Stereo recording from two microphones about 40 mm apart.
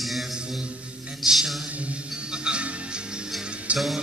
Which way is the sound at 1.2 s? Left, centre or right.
Centre.